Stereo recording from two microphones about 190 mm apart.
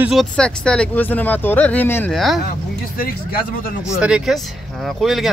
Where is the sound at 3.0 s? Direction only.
50° left (ahead or behind).